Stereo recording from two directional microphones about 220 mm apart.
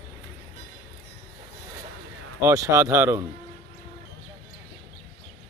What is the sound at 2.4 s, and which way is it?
Speech, 15° right (ahead or behind).